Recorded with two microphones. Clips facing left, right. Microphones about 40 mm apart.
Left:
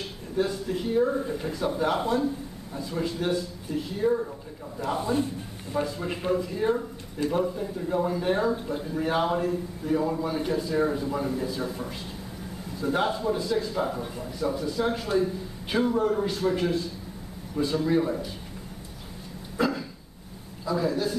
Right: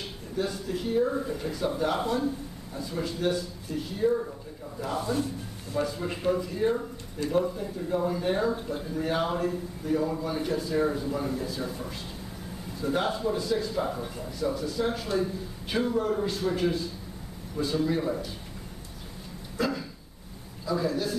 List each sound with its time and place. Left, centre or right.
0.5 s a man's voice: centre
5.9 s speech: centre
19.5 s a sound: centre
20.6 s speech: centre